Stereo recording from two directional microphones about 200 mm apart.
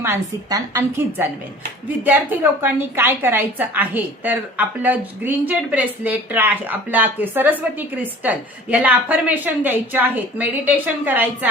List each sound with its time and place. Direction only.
0.0 s a woman's voice: 15° right (ahead or behind)